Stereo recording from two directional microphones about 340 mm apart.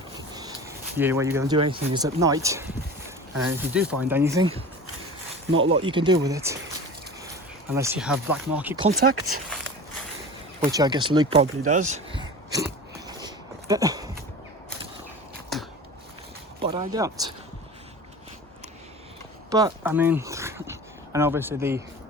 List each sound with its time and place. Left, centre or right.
0.9 s speech: centre
5.5 s speech: right
5.7 s speech: centre
7.8 s speech: centre
10.7 s speech: centre
13.1 s a sound: centre
15.5 s a sound: centre
16.6 s speech: centre
19.5 s a sound: centre